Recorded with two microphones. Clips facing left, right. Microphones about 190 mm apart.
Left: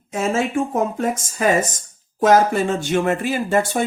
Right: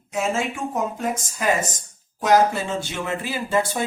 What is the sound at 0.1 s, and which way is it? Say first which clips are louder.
A woman's voice: left 4 dB; 55° left (ahead or behind).